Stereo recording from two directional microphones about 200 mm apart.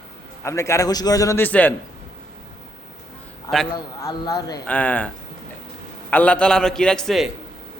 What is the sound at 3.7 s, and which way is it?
Speech, 20° left (ahead or behind).